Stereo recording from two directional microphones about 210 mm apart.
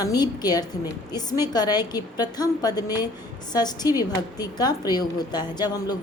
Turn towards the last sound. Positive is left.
turn(degrees=20)  # may be behind; listen again after turning